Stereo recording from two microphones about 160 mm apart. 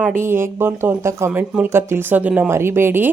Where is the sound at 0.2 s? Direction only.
15° right (ahead or behind).